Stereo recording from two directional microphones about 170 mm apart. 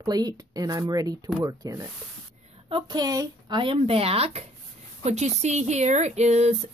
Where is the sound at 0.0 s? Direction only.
20° right (ahead or behind).